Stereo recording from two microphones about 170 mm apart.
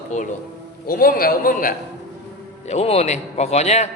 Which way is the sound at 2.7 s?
40° left (ahead or behind).